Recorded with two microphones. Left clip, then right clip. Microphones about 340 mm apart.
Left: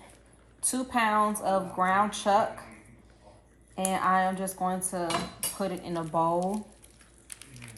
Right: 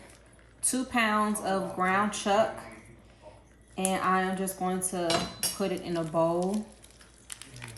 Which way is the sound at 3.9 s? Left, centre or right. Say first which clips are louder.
Left 2 dB; centre.